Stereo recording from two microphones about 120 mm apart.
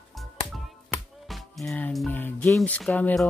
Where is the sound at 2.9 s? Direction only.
10° left (ahead or behind).